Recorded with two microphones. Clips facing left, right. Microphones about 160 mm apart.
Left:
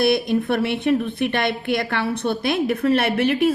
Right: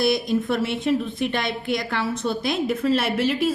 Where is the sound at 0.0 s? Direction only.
60° left (ahead or behind).